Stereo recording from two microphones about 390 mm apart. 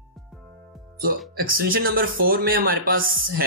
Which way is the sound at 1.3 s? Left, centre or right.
Right.